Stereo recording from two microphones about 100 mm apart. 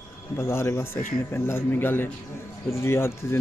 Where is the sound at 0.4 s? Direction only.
25° left (ahead or behind).